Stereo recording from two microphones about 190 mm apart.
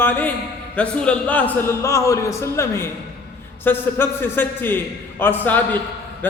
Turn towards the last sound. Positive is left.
turn(degrees=10)  # may be behind; listen again after turning